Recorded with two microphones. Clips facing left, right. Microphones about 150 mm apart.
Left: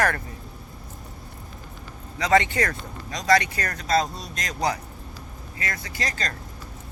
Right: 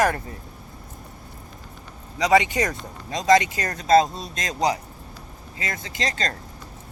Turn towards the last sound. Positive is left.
turn(degrees=-25)  # may be behind; listen again after turning